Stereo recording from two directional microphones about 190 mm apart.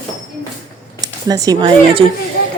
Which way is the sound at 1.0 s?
20° right (ahead or behind).